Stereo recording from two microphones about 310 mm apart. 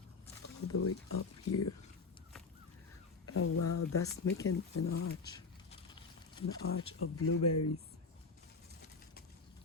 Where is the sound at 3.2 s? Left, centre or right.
Left.